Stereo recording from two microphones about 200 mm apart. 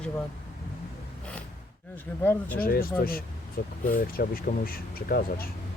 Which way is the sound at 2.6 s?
45° left (ahead or behind).